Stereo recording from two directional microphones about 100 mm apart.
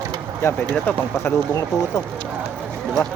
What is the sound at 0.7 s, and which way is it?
Speech, 20° left (ahead or behind).